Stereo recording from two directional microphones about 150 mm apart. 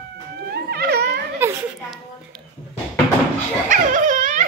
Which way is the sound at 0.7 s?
90° right.